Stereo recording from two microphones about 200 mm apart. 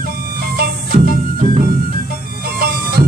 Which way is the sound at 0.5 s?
50° right (ahead or behind).